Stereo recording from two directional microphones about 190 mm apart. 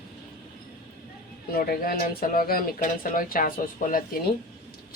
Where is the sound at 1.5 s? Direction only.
50° left (ahead or behind).